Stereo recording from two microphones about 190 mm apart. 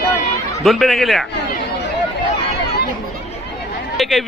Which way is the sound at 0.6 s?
Centre (ahead or behind).